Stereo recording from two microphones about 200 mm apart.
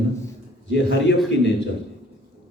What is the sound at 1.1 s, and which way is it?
Speech, 60° left (ahead or behind).